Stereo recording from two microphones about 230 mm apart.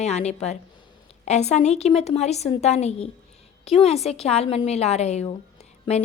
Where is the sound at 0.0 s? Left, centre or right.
Left.